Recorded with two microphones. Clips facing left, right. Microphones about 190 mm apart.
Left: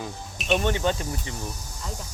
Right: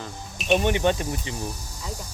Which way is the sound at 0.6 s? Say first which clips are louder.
Right 3 dB; 15° right (ahead or behind).